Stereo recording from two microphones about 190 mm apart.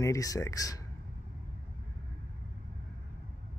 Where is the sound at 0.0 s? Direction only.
15° left (ahead or behind).